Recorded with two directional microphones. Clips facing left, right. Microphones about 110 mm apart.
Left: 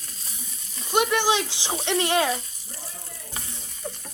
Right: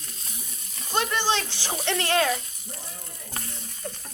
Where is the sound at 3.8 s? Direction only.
10° left (ahead or behind).